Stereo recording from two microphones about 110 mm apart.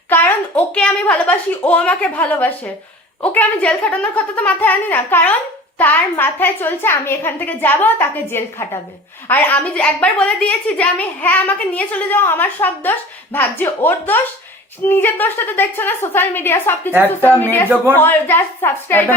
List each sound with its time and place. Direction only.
0.1 s a sound: 20° left (ahead or behind)
0.7 s a child's voice: 10° left (ahead or behind)
16.9 s speech: 20° right (ahead or behind)
17.9 s a woman's voice: 20° left (ahead or behind)